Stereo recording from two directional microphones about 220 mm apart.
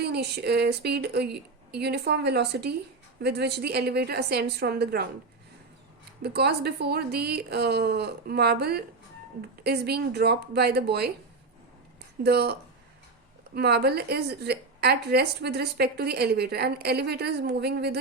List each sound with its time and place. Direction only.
0.0 s a woman's voice: 45° right (ahead or behind)
6.2 s a woman's voice: 50° right (ahead or behind)
12.2 s a woman's voice: 45° right (ahead or behind)